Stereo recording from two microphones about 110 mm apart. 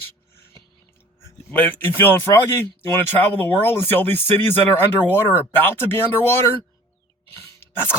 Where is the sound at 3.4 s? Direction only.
20° left (ahead or behind).